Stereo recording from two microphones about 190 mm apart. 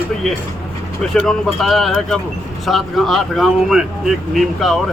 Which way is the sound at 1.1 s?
Centre (ahead or behind).